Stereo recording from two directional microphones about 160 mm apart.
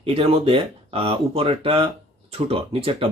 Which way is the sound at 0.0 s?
35° right (ahead or behind).